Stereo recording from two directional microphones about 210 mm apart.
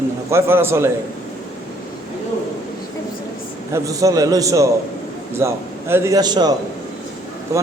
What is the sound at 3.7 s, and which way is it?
A man's voice, 15° right (ahead or behind).